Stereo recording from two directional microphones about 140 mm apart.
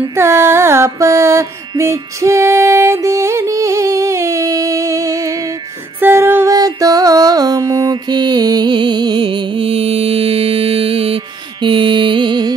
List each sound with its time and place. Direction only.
0.1 s mantra: 20° right (ahead or behind)
5.9 s music: 15° right (ahead or behind); by 12.5 s 35° right (ahead or behind)